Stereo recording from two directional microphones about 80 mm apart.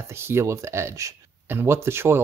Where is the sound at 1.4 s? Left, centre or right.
Right.